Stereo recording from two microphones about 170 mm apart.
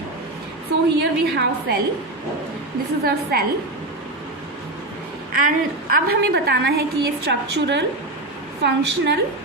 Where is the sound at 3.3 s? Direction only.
60° right (ahead or behind).